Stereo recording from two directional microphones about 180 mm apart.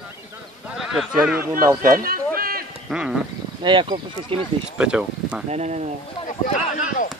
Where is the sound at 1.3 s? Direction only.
50° right (ahead or behind).